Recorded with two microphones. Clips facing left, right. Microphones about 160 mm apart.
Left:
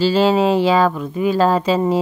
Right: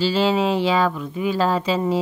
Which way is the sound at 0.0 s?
45° left (ahead or behind).